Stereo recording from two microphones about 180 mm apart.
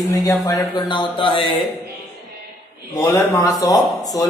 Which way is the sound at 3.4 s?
15° left (ahead or behind).